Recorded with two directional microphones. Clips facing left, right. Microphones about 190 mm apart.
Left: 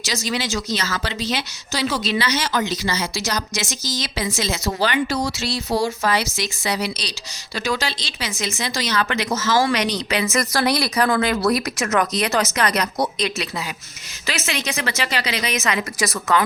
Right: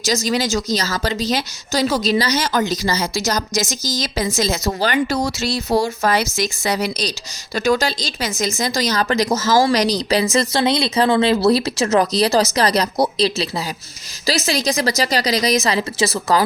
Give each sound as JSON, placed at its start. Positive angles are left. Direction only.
{"t": 0.0, "sound": "a woman's voice", "side_deg": -40}
{"t": 10.3, "sound": "a woman's voice", "side_deg": -25}